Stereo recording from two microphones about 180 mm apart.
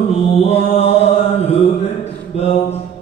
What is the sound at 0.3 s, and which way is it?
Mantra, 35° left (ahead or behind).